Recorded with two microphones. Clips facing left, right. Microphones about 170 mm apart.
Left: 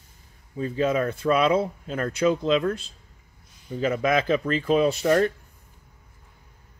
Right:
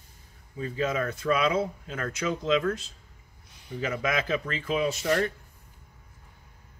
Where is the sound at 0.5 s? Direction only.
30° left (ahead or behind).